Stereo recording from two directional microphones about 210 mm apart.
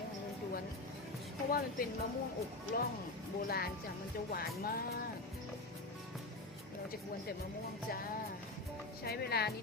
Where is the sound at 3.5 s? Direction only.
45° left (ahead or behind).